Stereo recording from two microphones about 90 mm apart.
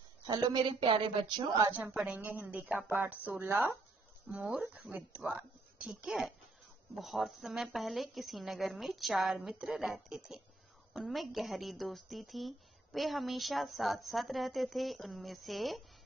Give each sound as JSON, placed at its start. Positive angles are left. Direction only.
{"t": 0.3, "sound": "a woman's voice", "side_deg": -50}
{"t": 0.7, "sound": "speech", "side_deg": -75}
{"t": 1.9, "sound": "speech", "side_deg": -10}
{"t": 2.1, "sound": "a woman's voice", "side_deg": -20}